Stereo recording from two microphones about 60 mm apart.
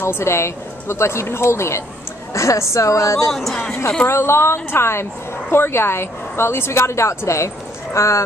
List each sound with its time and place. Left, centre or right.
0.0 s a woman's voice: left
3.3 s speech: centre
4.1 s a woman's voice: left